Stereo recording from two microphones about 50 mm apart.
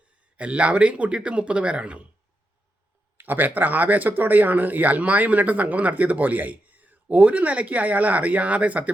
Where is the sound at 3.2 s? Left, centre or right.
Right.